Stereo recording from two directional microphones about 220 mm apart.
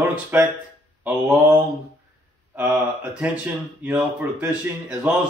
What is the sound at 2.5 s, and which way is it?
Speech, 10° right (ahead or behind).